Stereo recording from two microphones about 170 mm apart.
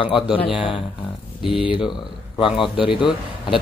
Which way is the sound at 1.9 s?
30° left (ahead or behind).